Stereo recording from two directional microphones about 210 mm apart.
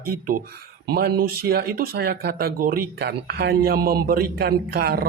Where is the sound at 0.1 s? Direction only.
40° right (ahead or behind).